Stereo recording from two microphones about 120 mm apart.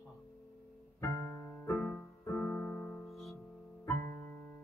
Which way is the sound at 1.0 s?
25° left (ahead or behind).